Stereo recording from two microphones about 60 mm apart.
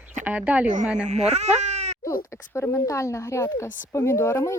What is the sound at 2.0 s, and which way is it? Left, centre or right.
Speech, left.